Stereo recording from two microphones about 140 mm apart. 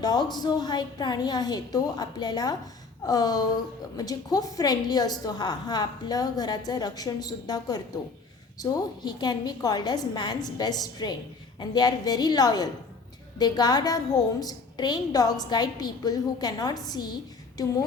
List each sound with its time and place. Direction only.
0.0 s a woman's voice: 30° left (ahead or behind)